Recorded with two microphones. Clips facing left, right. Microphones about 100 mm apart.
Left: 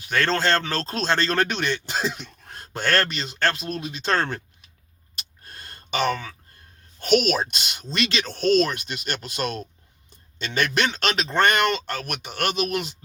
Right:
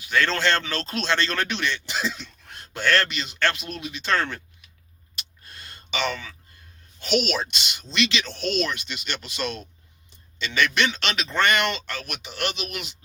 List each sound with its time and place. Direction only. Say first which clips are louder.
0.0 s speech: even; 45° left (ahead or behind)
5.1 s a sound: left 1 dB; 40° left (ahead or behind)
7.0 s speech: left 4 dB; 45° left (ahead or behind)